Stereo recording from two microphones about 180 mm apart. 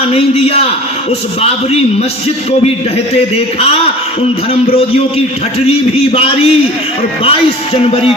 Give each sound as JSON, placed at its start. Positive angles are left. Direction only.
{"t": 0.1, "sound": "a man's voice", "side_deg": 35}
{"t": 4.7, "sound": "a man's voice", "side_deg": 30}